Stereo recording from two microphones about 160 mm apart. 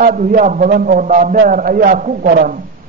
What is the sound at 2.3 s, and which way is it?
Speech, 70° right (ahead or behind).